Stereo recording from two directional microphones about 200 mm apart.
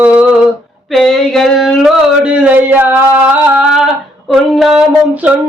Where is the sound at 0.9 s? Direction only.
Centre (ahead or behind).